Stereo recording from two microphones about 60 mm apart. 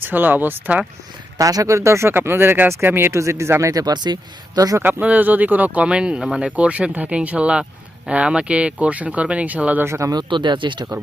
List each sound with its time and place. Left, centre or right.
0.0 s speech: right
1.4 s speech: right
2.1 s speech: right
3.2 s speech: right
4.5 s speech: right
4.8 s speech: right
9.8 s speech: right
10.9 s speech: right